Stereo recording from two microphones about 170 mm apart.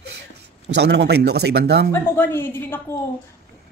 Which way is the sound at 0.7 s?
85° right.